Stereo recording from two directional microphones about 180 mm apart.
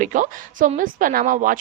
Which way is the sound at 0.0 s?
45° right (ahead or behind).